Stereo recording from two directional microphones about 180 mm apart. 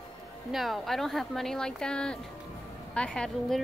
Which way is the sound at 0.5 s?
Centre (ahead or behind).